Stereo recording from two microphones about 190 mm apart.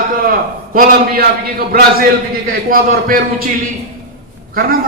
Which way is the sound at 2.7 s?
50° right (ahead or behind).